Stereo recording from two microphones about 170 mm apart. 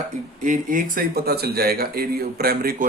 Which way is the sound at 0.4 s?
50° right (ahead or behind).